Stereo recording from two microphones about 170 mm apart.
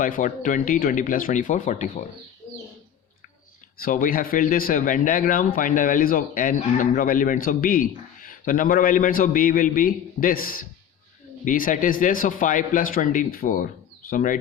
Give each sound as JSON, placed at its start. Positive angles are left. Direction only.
{"t": 0.0, "sound": "speech", "side_deg": 50}
{"t": 3.8, "sound": "speech", "side_deg": 55}